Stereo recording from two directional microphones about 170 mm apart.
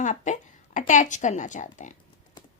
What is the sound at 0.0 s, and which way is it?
A woman's voice, 45° left (ahead or behind).